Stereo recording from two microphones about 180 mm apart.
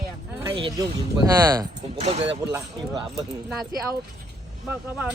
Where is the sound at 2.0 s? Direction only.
35° right (ahead or behind).